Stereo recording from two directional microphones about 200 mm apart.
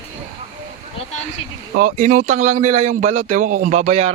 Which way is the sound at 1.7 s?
40° right (ahead or behind).